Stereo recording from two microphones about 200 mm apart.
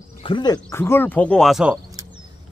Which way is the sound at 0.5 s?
10° left (ahead or behind).